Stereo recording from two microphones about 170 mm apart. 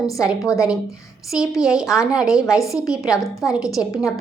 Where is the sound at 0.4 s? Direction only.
20° left (ahead or behind).